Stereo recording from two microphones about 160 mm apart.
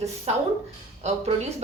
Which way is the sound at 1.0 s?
45° right (ahead or behind).